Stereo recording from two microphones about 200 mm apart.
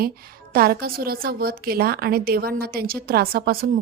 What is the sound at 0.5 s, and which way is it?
A woman's voice, 50° right (ahead or behind).